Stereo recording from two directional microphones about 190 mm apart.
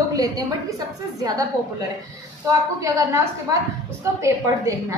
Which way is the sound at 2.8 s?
15° right (ahead or behind).